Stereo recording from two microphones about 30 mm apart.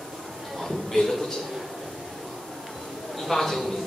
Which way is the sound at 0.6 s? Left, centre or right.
Centre.